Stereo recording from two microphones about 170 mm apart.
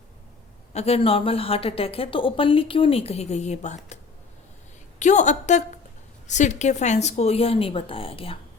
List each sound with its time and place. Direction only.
0.7 s a woman's voice: 35° left (ahead or behind)
4.9 s a woman's voice: 45° left (ahead or behind)